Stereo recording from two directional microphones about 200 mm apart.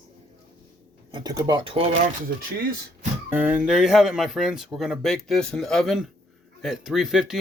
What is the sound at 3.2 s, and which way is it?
Speech, 10° right (ahead or behind).